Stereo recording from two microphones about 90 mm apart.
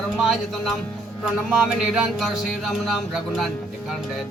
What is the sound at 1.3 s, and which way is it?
Music, 10° right (ahead or behind).